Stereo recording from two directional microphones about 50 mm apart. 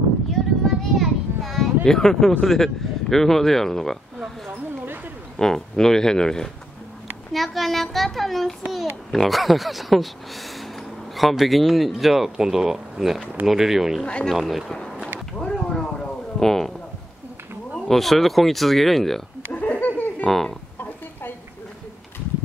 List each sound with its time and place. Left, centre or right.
0.9 s a sound: centre
2.4 s speech: centre
5.4 s speech: centre
7.3 s speech: centre
11.1 s speech: centre
14.0 s speech: centre
14.4 s speech: centre
15.3 s a sound: centre
17.7 s speech: centre
19.5 s laughter: left
20.2 s speech: centre